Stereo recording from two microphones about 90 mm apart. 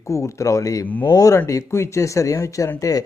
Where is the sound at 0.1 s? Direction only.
35° left (ahead or behind).